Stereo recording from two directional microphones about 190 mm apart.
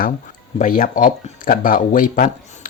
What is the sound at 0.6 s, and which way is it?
Speech, 45° left (ahead or behind).